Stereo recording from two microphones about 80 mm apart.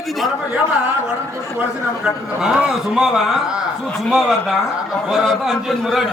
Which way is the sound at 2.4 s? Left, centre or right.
Centre.